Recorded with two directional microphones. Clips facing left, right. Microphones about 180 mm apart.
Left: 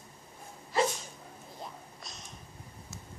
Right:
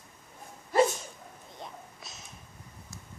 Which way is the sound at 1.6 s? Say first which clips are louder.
Right 1 dB; centre (ahead or behind).